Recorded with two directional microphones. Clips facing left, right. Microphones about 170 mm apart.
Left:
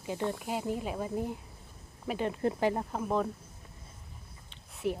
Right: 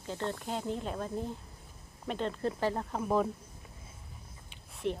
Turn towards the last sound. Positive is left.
turn(degrees=5)  # may be behind; listen again after turning